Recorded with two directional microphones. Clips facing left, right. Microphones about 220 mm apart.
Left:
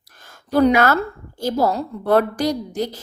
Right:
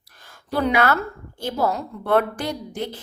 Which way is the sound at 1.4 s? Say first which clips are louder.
Left 4 dB; 40° left (ahead or behind).